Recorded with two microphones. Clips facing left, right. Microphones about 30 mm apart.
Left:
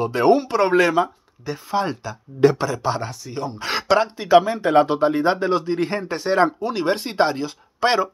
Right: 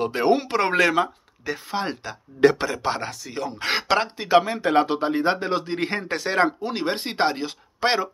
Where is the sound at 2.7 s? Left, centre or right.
Right.